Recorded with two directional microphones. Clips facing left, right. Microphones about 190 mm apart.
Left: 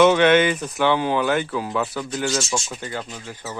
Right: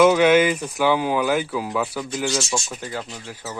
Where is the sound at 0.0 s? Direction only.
5° right (ahead or behind).